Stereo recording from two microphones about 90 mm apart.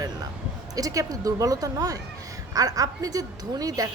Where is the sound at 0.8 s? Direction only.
40° right (ahead or behind).